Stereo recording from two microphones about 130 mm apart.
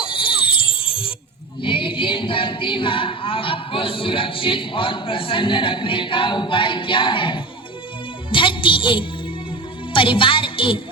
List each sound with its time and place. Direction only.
0.0 s music: 40° left (ahead or behind)
1.6 s a capella: 40° left (ahead or behind)
8.3 s music: 40° left (ahead or behind)